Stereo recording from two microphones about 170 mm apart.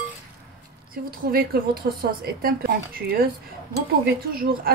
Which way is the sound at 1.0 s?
60° right (ahead or behind).